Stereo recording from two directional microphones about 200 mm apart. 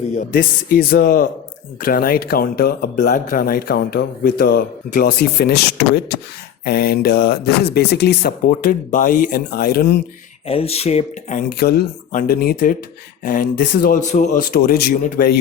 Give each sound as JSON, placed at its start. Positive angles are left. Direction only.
{"t": 0.2, "sound": "speech", "side_deg": 45}
{"t": 10.4, "sound": "speech", "side_deg": 30}
{"t": 11.4, "sound": "speech", "side_deg": 55}